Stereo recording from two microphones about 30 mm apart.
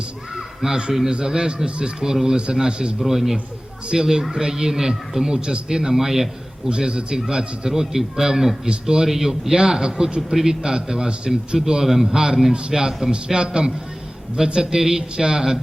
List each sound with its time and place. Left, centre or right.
0.3 s speech: centre
3.1 s a man's voice: centre
6.7 s a man's voice: right
9.0 s a man's voice: centre
12.1 s speech: right
12.7 s a man's voice: centre
13.1 s speech: right